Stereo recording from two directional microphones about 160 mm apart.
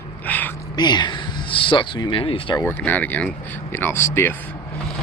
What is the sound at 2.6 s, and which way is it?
Speech, 10° left (ahead or behind).